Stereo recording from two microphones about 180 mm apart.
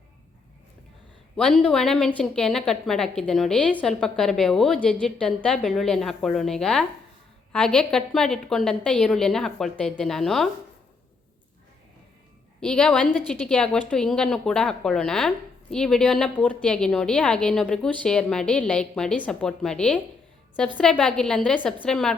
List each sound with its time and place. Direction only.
1.4 s a woman's voice: 5° left (ahead or behind)
12.5 s a woman's voice: 5° left (ahead or behind)